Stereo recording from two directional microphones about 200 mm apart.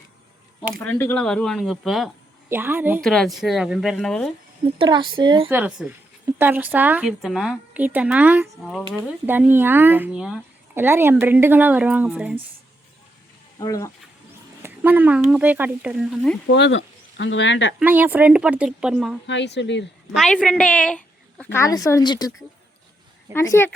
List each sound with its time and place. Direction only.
0.7 s a woman's voice: 10° left (ahead or behind); by 3.0 s 10° right (ahead or behind)
3.0 s speech: 5° left (ahead or behind)
4.6 s speech: 25° right (ahead or behind)
5.5 s a woman's voice: 5° right (ahead or behind)
9.2 s a woman's voice: 10° right (ahead or behind)
13.6 s a woman's voice: 15° left (ahead or behind)
14.6 s a sound: 10° right (ahead or behind)
15.3 s speech: 10° right (ahead or behind)
16.5 s speech: 60° left (ahead or behind)
17.7 s speech: 10° right (ahead or behind)
19.3 s speech: 60° left (ahead or behind)
20.1 s a woman's voice: 5° left (ahead or behind)